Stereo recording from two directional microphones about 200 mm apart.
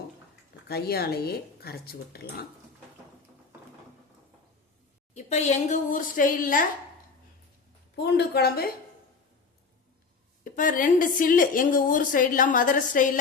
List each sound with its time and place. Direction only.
0.7 s a woman's voice: 50° left (ahead or behind)
5.1 s a woman's voice: 35° left (ahead or behind)
7.9 s a woman's voice: 55° left (ahead or behind)
10.4 s a woman's voice: 40° left (ahead or behind)